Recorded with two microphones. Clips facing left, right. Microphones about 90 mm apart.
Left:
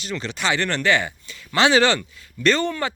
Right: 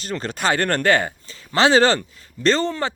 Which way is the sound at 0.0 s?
45° right (ahead or behind).